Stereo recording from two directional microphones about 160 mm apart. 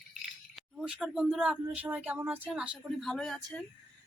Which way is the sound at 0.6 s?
5° right (ahead or behind).